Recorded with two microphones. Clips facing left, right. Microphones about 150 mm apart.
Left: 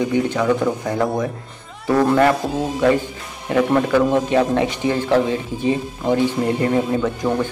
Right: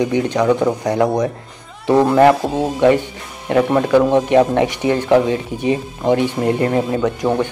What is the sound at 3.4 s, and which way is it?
Speech, 15° right (ahead or behind).